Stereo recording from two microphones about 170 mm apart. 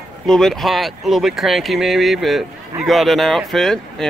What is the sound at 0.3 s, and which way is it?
Speech, centre (ahead or behind).